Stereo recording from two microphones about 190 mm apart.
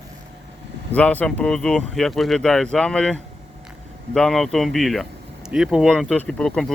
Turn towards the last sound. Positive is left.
turn(degrees=5)  # may be behind; listen again after turning